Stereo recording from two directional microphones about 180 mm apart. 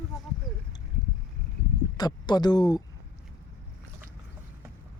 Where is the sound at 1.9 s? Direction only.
25° left (ahead or behind).